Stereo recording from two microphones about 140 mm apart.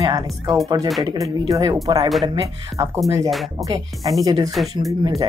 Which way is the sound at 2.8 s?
25° right (ahead or behind).